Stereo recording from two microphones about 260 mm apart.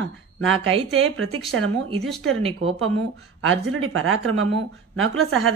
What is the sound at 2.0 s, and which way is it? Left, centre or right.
Speech, centre.